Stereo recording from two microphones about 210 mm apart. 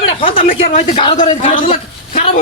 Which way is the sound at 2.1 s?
30° left (ahead or behind).